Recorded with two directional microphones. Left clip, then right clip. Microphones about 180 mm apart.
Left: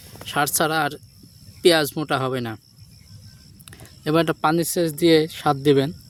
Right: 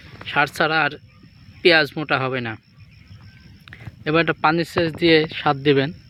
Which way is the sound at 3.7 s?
30° left (ahead or behind).